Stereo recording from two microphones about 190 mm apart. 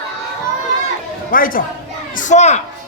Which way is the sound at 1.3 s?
45° left (ahead or behind).